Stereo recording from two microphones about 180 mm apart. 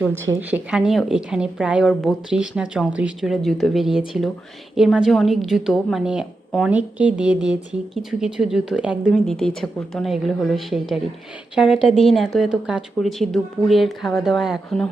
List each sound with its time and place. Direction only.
0.3 s a woman's voice: 10° right (ahead or behind)
11.9 s a woman's voice: 35° left (ahead or behind)
12.1 s a woman's voice: centre (ahead or behind)